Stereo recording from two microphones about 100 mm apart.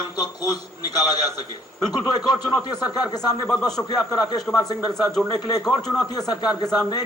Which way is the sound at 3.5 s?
5° left (ahead or behind).